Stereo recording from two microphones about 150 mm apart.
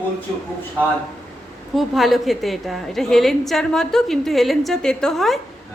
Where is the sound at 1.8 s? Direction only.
Centre (ahead or behind).